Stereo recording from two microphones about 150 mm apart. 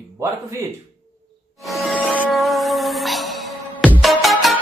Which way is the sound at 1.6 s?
Centre (ahead or behind).